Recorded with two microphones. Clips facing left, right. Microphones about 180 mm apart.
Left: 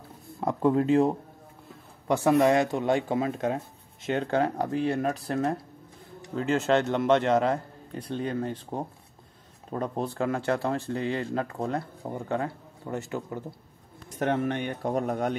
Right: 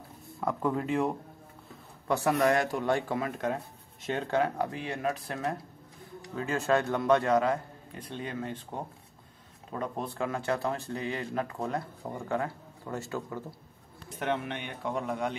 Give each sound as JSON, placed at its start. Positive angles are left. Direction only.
{"t": 0.4, "sound": "speech", "side_deg": 25}
{"t": 6.2, "sound": "speech", "side_deg": 25}
{"t": 8.1, "sound": "speech", "side_deg": 40}
{"t": 9.7, "sound": "speech", "side_deg": 35}
{"t": 14.0, "sound": "a man's voice", "side_deg": 45}